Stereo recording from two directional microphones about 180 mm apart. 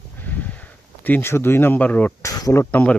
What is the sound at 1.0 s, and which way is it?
Speech, 10° left (ahead or behind).